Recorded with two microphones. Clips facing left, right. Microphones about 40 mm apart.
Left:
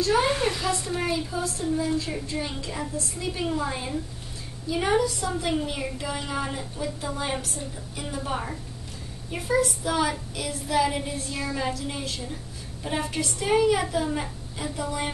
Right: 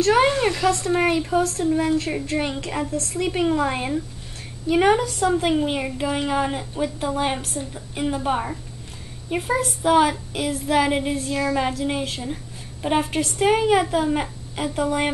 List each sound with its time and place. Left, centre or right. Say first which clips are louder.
0.0 s speech: right 5 dB; right
5.5 s child singing: right 6 dB; right
14.1 s a woman's voice: right 6 dB; right